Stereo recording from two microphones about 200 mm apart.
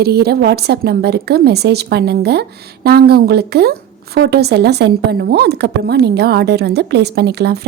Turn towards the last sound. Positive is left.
turn(degrees=-55)  # may be behind; listen again after turning